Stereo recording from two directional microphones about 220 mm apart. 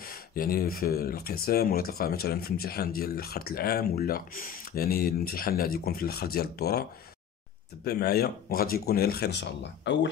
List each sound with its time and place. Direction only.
0.0 s speech: 40° left (ahead or behind)
7.8 s speech: 45° left (ahead or behind)